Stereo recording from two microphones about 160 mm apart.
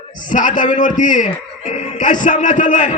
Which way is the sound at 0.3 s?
55° left (ahead or behind).